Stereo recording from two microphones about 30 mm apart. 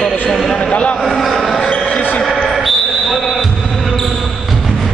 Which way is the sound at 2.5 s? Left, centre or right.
Centre.